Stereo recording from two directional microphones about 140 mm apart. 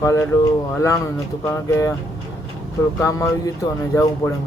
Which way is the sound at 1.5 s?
20° left (ahead or behind).